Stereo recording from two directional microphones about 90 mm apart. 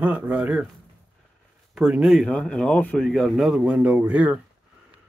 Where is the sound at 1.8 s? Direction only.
10° right (ahead or behind).